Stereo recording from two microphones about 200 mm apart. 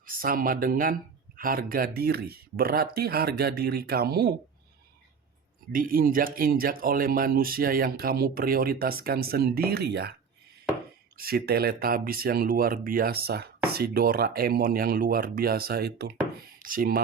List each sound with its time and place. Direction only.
0.0 s speech: 45° right (ahead or behind)
5.7 s speech: 45° right (ahead or behind)
11.2 s speech: 50° right (ahead or behind)